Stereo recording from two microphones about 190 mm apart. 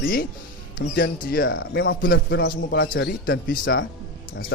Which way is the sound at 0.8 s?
50° left (ahead or behind).